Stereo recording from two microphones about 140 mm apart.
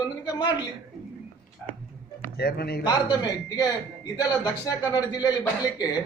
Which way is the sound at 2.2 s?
90° left.